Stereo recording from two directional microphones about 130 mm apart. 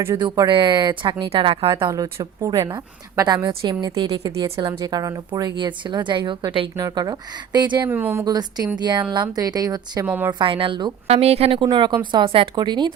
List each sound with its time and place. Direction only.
0.2 s speech: 35° right (ahead or behind)
6.7 s speech: 30° right (ahead or behind)
7.9 s speech: 15° right (ahead or behind)
10.1 s a woman's voice: 15° right (ahead or behind)
10.3 s speech: 40° right (ahead or behind)
11.1 s speech: 50° right (ahead or behind)
11.6 s speech: 35° right (ahead or behind)